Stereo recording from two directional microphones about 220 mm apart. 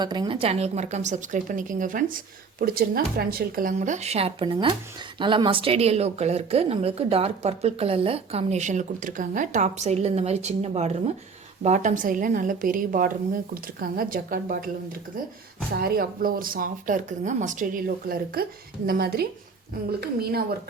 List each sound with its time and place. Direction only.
0.0 s a woman's voice: 20° right (ahead or behind); by 14.7 s 40° right (ahead or behind)
15.7 s a woman's voice: 40° right (ahead or behind)